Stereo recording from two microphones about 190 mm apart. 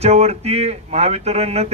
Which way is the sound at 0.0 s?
35° right (ahead or behind).